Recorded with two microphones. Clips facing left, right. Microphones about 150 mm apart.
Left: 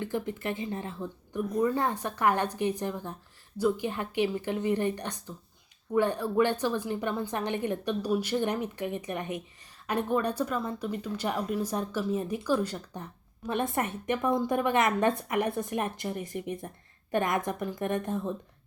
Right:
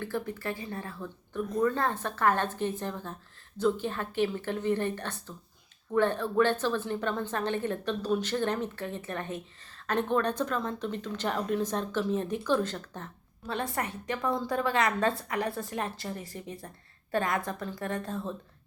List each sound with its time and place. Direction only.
0.0 s a woman's voice: 20° left (ahead or behind)